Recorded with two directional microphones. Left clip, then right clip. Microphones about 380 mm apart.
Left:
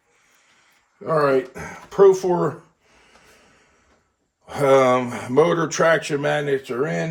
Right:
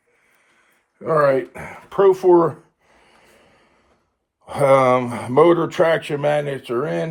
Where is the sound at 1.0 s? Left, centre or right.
Centre.